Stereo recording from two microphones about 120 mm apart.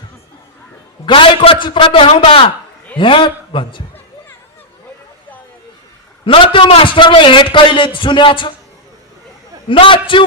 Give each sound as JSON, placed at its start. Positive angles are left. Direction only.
{"t": 1.0, "sound": "a man's voice", "side_deg": 45}
{"t": 6.2, "sound": "a man's voice", "side_deg": 45}
{"t": 9.6, "sound": "a man's voice", "side_deg": 45}